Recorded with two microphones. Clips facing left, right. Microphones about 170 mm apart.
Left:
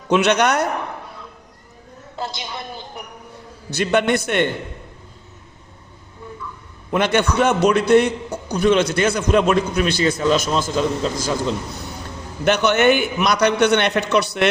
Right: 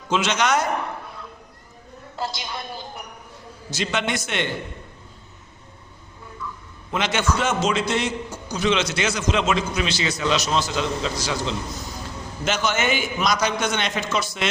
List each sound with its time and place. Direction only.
0.1 s a man's voice: 60° left (ahead or behind)
3.7 s a man's voice: 60° left (ahead or behind)
6.9 s a man's voice: 60° left (ahead or behind)
12.5 s a man's voice: 65° left (ahead or behind)